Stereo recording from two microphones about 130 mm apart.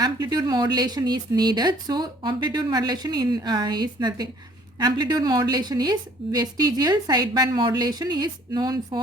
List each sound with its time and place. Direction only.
0.0 s speech: 30° right (ahead or behind)